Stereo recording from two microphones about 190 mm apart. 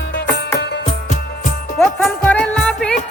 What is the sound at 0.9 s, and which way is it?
Music, 35° left (ahead or behind).